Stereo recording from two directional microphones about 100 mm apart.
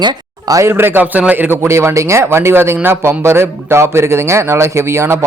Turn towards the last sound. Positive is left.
turn(degrees=-25)  # may be behind; listen again after turning